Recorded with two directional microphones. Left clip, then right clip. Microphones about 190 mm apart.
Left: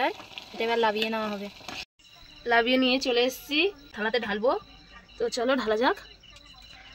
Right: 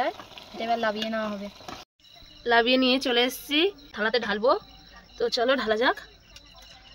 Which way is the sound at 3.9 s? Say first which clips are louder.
Right 2 dB; 5° right (ahead or behind).